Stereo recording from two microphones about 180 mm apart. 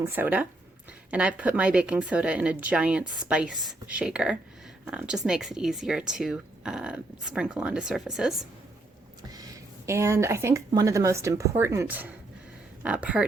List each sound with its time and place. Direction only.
0.0 s speech: 10° right (ahead or behind)
9.3 s speech: 20° right (ahead or behind)